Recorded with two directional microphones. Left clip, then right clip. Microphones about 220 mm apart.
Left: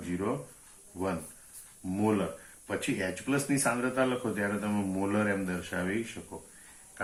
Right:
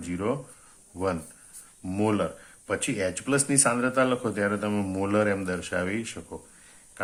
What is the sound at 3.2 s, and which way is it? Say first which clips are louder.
Speech: right 5 dB; 50° right (ahead or behind).